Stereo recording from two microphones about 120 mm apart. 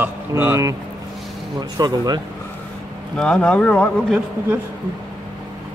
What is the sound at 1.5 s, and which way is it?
Speech, 35° right (ahead or behind).